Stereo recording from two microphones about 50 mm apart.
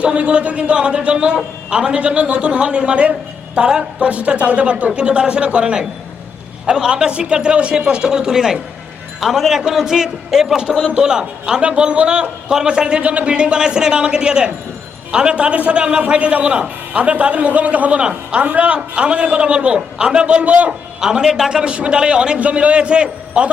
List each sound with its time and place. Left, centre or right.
0.0 s a man's voice: right
21.0 s a man's voice: centre
21.6 s a man's voice: right